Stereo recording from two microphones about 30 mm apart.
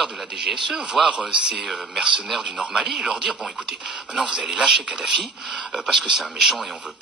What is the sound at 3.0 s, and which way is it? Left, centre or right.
Speech, right.